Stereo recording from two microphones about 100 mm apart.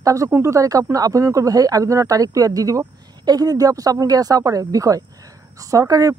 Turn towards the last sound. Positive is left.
turn(degrees=-35)  # may be behind; listen again after turning